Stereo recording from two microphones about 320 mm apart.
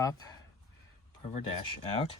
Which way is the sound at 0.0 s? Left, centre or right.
Centre.